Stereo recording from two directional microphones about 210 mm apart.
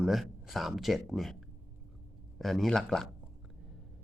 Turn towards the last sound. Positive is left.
turn(degrees=0)  # may be behind; listen again after turning